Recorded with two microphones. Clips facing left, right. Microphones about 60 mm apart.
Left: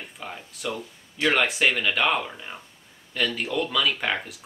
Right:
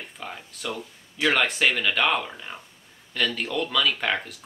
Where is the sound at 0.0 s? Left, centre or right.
Centre.